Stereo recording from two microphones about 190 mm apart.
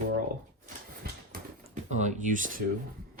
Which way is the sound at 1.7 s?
40° right (ahead or behind).